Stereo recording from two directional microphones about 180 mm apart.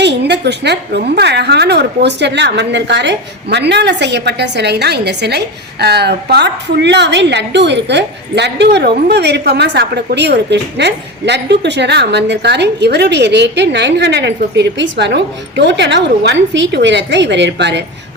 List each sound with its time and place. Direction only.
0.0 s a woman's voice: 70° right (ahead or behind)